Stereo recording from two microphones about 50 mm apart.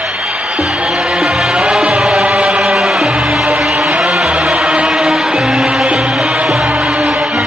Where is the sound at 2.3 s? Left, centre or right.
Right.